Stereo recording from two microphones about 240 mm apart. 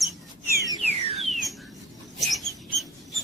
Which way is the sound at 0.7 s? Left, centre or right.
Right.